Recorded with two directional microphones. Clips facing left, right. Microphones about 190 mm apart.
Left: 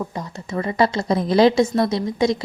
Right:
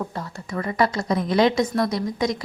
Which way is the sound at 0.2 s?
25° left (ahead or behind).